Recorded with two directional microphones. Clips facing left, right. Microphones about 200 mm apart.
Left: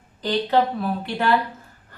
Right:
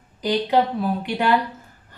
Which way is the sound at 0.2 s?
15° right (ahead or behind).